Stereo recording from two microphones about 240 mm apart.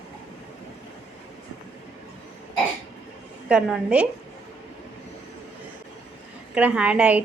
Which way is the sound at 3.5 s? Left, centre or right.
Centre.